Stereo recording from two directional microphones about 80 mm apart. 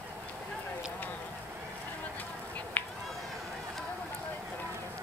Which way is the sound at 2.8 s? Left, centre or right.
Left.